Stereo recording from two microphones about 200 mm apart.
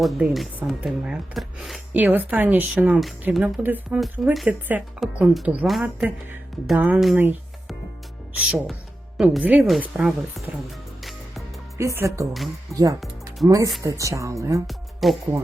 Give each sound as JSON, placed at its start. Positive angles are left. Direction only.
{"t": 0.0, "sound": "chopping", "side_deg": 0}
{"t": 6.7, "sound": "speech", "side_deg": -5}
{"t": 8.4, "sound": "chopping", "side_deg": 0}
{"t": 11.8, "sound": "speech", "side_deg": -15}
{"t": 13.4, "sound": "chopping", "side_deg": 0}
{"t": 13.8, "sound": "speech", "side_deg": -15}
{"t": 15.0, "sound": "chopping", "side_deg": 0}